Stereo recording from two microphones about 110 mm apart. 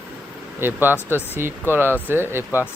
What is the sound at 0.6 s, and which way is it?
Speech, 20° right (ahead or behind).